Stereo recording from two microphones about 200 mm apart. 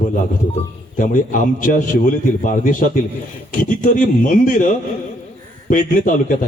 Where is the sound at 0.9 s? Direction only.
40° left (ahead or behind).